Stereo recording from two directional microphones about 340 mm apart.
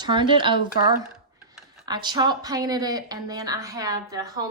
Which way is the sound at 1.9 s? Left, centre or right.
Centre.